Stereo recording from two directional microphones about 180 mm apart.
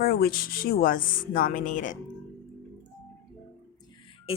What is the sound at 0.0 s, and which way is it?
A woman's voice, 55° left (ahead or behind).